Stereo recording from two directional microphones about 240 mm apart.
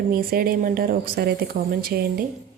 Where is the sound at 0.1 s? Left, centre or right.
Right.